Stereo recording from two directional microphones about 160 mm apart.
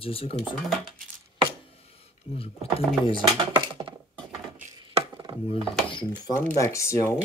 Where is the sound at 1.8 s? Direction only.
40° left (ahead or behind).